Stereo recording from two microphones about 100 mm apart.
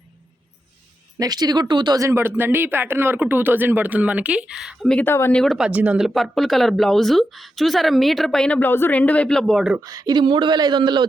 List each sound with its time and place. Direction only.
1.2 s speech: 45° right (ahead or behind)
2.0 s speech: 25° right (ahead or behind); by 4.9 s 5° right (ahead or behind)
5.0 s speech: 25° left (ahead or behind)
5.3 s speech: 5° left (ahead or behind)
5.5 s speech: 10° right (ahead or behind)
6.1 s speech: centre (ahead or behind)
9.8 s speech: 40° right (ahead or behind)